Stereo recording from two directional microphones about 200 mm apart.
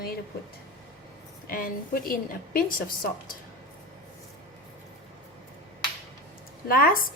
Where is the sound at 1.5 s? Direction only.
45° left (ahead or behind).